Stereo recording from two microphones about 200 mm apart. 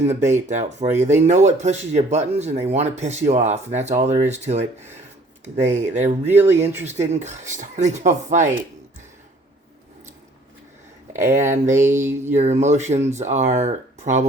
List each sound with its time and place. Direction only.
0.1 s speech: 35° right (ahead or behind)
11.1 s speech: 15° right (ahead or behind)
12.2 s speech: 35° right (ahead or behind)